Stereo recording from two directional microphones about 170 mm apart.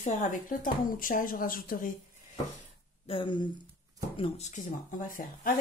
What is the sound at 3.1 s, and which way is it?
Speech, 30° left (ahead or behind).